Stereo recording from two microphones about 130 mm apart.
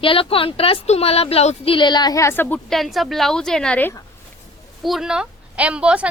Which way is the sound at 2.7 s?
Centre (ahead or behind).